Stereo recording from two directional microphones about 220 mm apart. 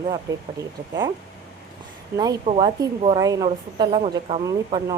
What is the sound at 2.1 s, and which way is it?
A woman's voice, 20° right (ahead or behind).